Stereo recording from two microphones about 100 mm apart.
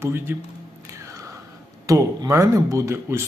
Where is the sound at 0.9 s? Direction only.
30° right (ahead or behind).